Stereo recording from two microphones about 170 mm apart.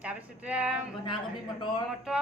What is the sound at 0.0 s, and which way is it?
Speech, 5° right (ahead or behind).